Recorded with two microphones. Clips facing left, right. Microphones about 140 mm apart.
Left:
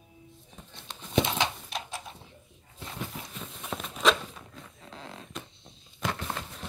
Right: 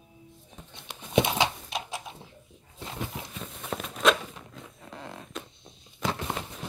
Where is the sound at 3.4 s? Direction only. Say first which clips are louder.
Right 2 dB; centre (ahead or behind).